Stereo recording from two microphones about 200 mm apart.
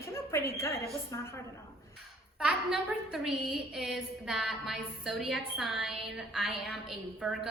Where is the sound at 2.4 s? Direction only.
5° right (ahead or behind).